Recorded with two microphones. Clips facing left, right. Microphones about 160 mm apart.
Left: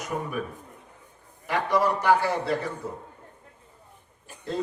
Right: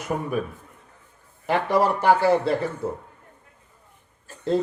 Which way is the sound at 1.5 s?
30° right (ahead or behind).